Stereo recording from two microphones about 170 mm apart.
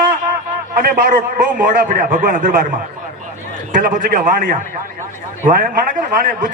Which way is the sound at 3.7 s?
55° right (ahead or behind).